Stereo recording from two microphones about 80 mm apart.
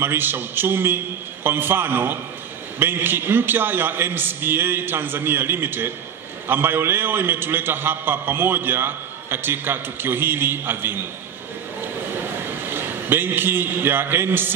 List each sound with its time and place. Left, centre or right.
0.0 s a man's voice: right
12.6 s a man's voice: right